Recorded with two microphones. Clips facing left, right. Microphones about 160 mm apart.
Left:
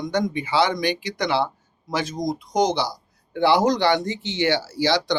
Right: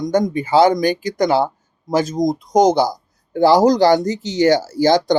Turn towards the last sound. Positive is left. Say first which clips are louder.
# right 7 dB
turn(degrees=-45)  # may be behind; listen again after turning